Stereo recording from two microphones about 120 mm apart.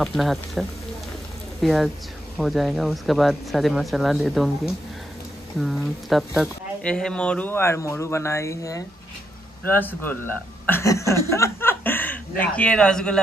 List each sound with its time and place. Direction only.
0.0 s speech: centre (ahead or behind); by 8.8 s 25° left (ahead or behind)
9.7 s speech: 15° left (ahead or behind)